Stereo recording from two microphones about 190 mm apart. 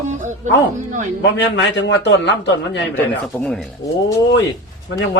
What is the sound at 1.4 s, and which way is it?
A man's voice, 65° left (ahead or behind).